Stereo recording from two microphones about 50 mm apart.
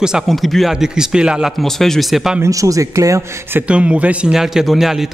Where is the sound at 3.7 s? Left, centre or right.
Right.